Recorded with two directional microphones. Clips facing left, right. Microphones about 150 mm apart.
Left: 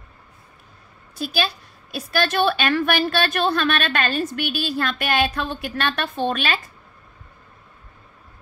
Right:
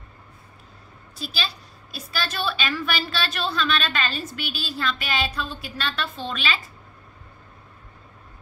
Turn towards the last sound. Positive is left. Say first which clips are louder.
# left 6 dB
turn(degrees=55)  # may be behind; listen again after turning